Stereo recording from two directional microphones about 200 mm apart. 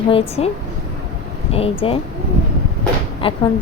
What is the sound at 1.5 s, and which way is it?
Speech, 30° left (ahead or behind).